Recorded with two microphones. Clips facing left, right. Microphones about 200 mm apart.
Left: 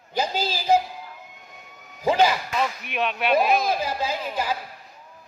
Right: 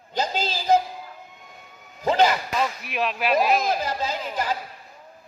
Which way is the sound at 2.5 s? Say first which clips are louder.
Even; centre (ahead or behind).